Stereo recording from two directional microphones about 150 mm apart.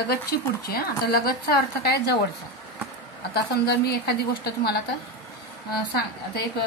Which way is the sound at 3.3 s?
90° left.